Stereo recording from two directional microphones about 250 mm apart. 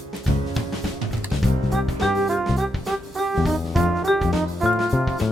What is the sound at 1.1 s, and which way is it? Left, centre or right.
Music, centre.